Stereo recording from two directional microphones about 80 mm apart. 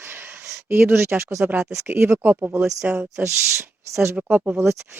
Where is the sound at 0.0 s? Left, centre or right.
Right.